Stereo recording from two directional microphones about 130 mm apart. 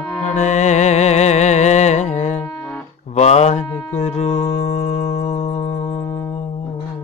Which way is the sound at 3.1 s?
55° left (ahead or behind).